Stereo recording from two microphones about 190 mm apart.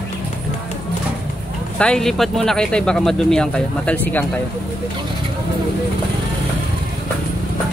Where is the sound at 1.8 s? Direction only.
5° left (ahead or behind).